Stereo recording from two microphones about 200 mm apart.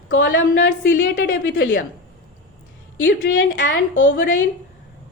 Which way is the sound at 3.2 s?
65° left (ahead or behind).